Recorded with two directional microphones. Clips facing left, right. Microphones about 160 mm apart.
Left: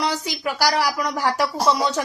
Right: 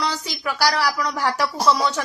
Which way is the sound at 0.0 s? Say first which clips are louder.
Left 2 dB; 15° left (ahead or behind).